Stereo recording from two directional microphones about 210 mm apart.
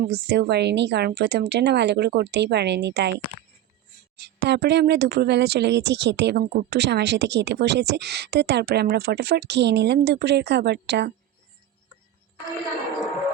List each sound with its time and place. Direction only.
0.0 s speech: 50° right (ahead or behind)
4.2 s speech: 55° right (ahead or behind)